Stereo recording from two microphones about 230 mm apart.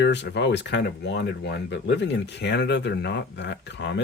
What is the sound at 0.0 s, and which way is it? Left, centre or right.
Speech, left.